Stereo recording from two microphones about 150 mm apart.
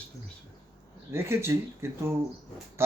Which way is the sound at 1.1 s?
15° right (ahead or behind).